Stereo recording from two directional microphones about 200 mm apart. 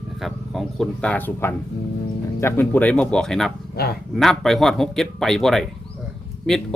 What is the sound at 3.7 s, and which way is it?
Speech, 50° left (ahead or behind).